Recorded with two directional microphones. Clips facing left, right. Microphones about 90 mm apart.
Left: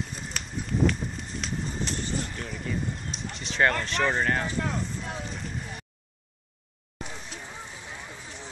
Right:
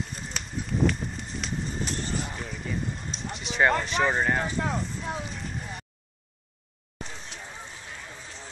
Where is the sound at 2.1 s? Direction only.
5° right (ahead or behind).